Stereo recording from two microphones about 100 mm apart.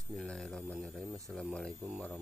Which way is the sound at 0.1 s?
5° left (ahead or behind).